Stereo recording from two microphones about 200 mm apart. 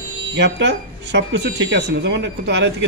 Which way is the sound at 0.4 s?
60° right (ahead or behind).